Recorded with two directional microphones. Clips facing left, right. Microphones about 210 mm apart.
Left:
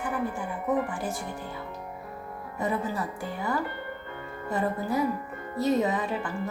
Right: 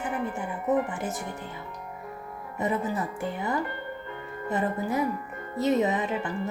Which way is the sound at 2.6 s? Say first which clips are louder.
Right 1 dB; 20° right (ahead or behind).